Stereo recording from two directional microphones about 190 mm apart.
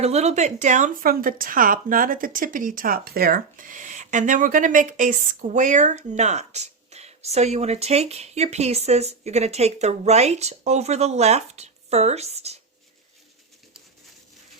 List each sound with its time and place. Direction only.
0.0 s speech: 35° right (ahead or behind)